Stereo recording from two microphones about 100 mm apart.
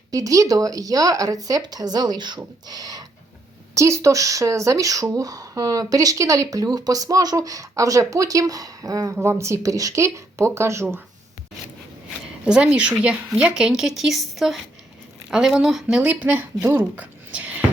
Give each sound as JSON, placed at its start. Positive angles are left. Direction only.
{"t": 0.1, "sound": "speech", "side_deg": -35}
{"t": 3.8, "sound": "speech", "side_deg": -30}
{"t": 9.1, "sound": "speech", "side_deg": -25}
{"t": 12.5, "sound": "a woman's voice", "side_deg": -10}
{"t": 17.0, "sound": "a sound", "side_deg": -15}